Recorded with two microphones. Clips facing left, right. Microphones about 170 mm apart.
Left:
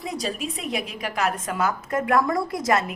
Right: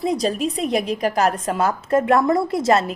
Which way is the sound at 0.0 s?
35° right (ahead or behind).